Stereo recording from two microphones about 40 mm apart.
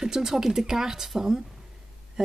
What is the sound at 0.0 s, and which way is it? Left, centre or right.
Speech, centre.